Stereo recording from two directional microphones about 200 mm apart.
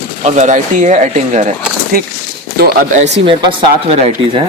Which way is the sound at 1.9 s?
45° right (ahead or behind).